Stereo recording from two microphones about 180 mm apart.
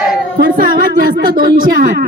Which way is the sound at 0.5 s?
50° right (ahead or behind).